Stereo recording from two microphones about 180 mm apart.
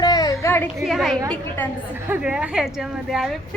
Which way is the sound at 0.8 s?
Centre (ahead or behind).